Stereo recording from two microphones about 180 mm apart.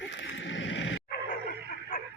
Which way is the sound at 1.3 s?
45° left (ahead or behind).